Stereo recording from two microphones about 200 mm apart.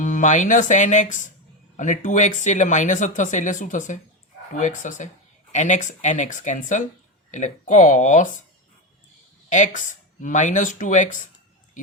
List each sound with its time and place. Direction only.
0.0 s speech: 40° left (ahead or behind)
9.5 s speech: 40° left (ahead or behind)